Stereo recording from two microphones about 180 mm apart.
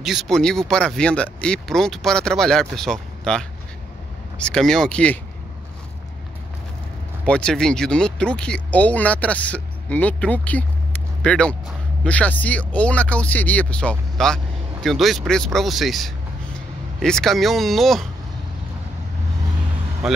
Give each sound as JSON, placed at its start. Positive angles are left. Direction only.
{"t": 0.0, "sound": "speech", "side_deg": 0}
{"t": 7.2, "sound": "speech", "side_deg": 5}